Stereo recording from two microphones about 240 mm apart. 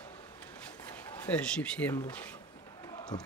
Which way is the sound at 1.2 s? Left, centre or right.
Centre.